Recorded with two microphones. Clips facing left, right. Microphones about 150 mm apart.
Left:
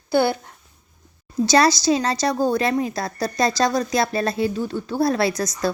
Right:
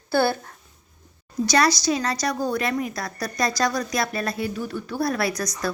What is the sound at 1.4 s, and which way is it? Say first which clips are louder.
Speech: left 4 dB; 25° left (ahead or behind).